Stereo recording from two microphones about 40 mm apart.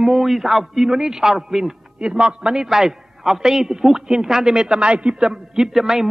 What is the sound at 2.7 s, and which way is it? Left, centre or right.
A man's voice, centre.